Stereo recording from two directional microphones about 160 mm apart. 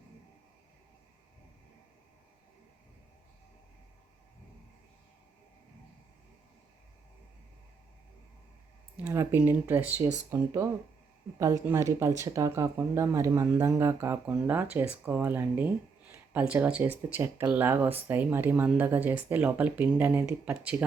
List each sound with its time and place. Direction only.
9.0 s speech: 15° right (ahead or behind)